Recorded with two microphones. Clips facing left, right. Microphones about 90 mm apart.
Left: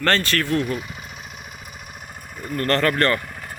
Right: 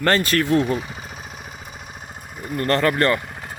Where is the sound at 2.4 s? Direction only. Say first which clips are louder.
Right 1 dB; 20° right (ahead or behind).